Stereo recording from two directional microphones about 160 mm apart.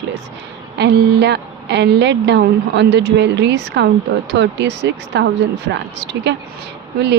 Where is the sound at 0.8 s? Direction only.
90° right.